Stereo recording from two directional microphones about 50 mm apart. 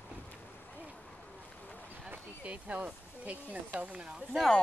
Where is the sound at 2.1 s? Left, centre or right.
Right.